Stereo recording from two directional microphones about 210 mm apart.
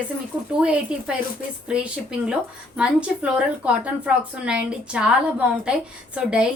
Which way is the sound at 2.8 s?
5° right (ahead or behind).